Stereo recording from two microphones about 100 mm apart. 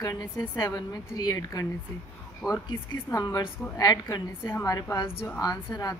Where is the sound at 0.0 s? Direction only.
40° left (ahead or behind).